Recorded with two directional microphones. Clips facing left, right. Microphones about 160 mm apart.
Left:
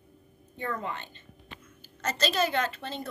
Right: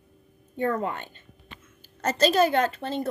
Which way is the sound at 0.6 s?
45° right (ahead or behind).